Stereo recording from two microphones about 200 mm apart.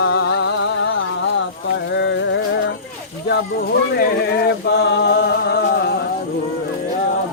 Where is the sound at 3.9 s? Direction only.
55° left (ahead or behind).